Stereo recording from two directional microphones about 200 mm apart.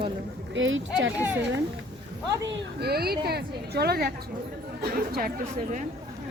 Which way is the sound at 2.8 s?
50° right (ahead or behind).